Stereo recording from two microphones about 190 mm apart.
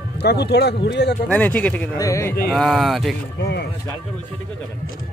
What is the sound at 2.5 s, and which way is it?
Speech, centre (ahead or behind).